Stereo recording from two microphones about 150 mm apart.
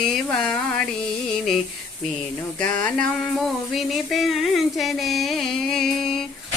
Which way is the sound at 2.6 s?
10° left (ahead or behind).